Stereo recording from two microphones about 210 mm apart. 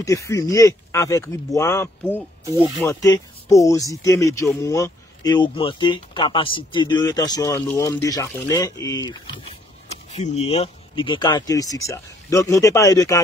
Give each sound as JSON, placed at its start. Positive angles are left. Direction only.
{"t": 0.0, "sound": "speech", "side_deg": 15}
{"t": 9.8, "sound": "speech", "side_deg": 30}